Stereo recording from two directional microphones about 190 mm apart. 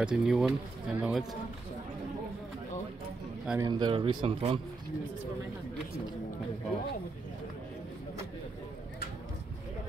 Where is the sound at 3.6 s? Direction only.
25° right (ahead or behind).